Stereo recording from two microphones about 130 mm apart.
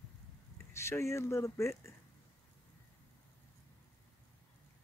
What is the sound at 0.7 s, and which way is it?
Speech, 20° left (ahead or behind).